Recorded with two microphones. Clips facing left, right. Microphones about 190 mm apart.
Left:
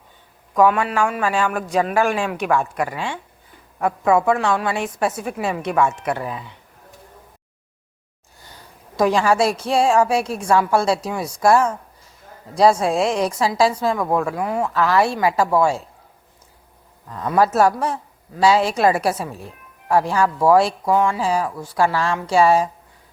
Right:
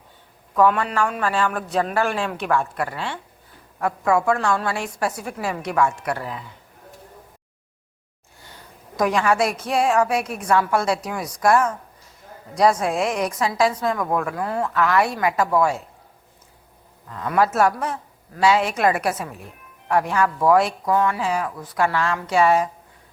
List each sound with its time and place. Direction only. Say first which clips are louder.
0.5 s a man's voice: left 2 dB; 10° left (ahead or behind)
9.0 s a woman's voice: left 3 dB; 30° left (ahead or behind)
14.7 s speech: left 2 dB; 30° left (ahead or behind)
17.2 s speech: left 3 dB; 35° left (ahead or behind)